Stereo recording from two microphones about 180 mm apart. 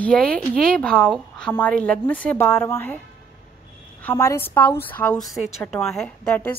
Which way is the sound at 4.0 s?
15° left (ahead or behind).